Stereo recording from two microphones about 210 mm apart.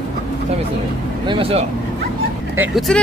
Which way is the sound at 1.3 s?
25° right (ahead or behind).